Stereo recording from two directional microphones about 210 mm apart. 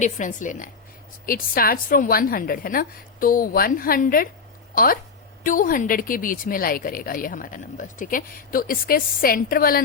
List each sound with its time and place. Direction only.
0.0 s a woman's voice: 35° left (ahead or behind)